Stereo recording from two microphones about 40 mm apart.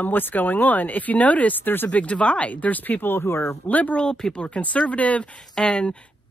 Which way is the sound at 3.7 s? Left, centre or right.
Left.